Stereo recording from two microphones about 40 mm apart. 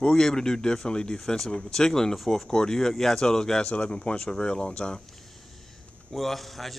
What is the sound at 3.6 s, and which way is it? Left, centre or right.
Speech, left.